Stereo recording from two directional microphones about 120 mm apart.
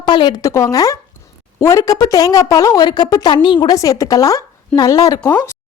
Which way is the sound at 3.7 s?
25° left (ahead or behind).